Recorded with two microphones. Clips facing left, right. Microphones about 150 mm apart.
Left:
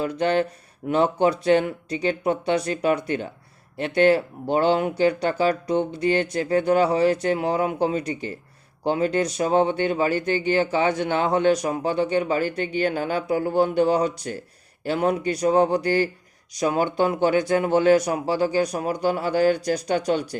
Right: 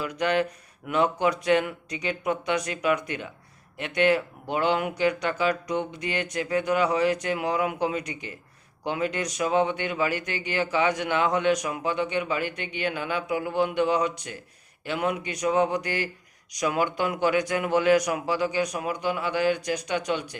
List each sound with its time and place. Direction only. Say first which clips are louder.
0.0 s a man's voice: left 3 dB; 30° left (ahead or behind)